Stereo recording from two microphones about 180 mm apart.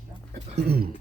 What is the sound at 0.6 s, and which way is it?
Cough, 60° right (ahead or behind).